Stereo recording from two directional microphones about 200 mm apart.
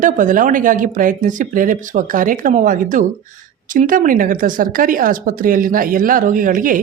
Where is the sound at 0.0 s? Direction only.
40° right (ahead or behind).